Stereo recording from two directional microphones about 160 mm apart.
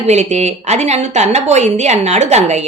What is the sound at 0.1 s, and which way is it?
Speech, 45° right (ahead or behind).